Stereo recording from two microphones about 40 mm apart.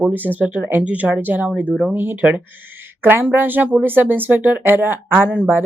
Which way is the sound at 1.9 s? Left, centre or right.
Right.